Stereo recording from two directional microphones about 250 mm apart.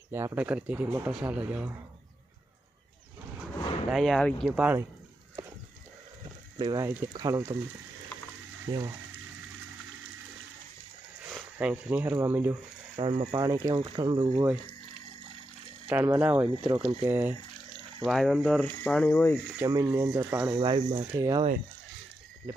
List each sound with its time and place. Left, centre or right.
0.1 s speech: centre
3.8 s speech: centre
6.6 s speech: centre
8.7 s speech: centre
11.5 s speech: centre
13.0 s speech: centre
15.9 s speech: centre
17.0 s speech: centre
19.5 s speech: centre